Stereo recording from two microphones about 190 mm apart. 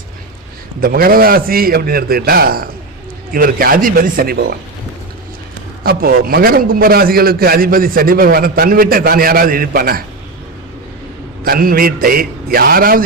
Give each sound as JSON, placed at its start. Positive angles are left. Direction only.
{"t": 0.8, "sound": "a man's voice", "side_deg": -50}
{"t": 5.8, "sound": "a man's voice", "side_deg": -50}
{"t": 11.4, "sound": "a man's voice", "side_deg": -50}